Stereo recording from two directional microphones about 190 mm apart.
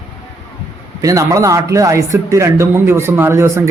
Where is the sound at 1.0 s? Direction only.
15° right (ahead or behind).